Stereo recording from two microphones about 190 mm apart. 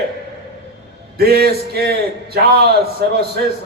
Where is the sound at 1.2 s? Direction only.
55° right (ahead or behind).